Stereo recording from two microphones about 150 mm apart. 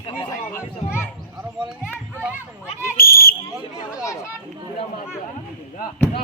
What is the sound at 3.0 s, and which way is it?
Whistle, 80° left.